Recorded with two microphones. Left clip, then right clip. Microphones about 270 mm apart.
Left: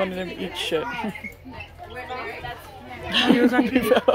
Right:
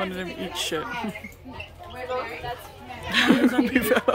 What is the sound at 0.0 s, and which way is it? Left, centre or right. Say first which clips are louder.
Speech: left 3 dB; centre.